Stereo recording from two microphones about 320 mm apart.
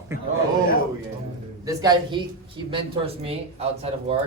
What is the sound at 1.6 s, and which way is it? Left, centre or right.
Speech, centre.